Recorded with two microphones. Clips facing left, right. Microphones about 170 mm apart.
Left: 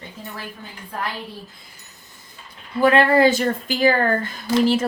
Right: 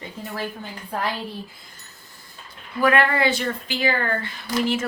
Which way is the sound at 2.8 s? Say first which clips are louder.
Left 5 dB; 30° left (ahead or behind).